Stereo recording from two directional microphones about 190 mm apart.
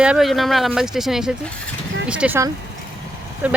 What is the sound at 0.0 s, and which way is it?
Speech, 5° right (ahead or behind).